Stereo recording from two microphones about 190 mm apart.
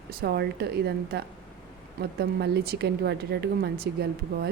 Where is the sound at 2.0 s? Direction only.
55° right (ahead or behind).